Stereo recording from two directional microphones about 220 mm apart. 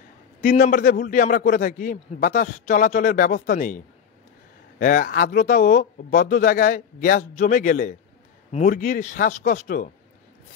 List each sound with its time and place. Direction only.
0.4 s a man's voice: 40° left (ahead or behind)